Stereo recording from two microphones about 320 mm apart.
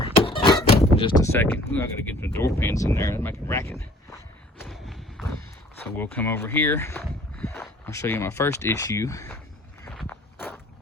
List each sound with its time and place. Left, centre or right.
0.0 s thunk: centre
0.9 s speech: centre
4.6 s thump: centre
5.8 s speech: centre
9.8 s walk: centre